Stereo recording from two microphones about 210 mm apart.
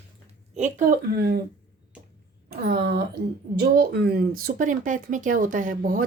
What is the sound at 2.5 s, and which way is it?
Speech, 50° right (ahead or behind).